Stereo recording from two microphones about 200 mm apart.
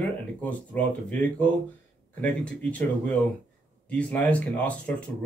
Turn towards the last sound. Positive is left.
turn(degrees=5)  # may be behind; listen again after turning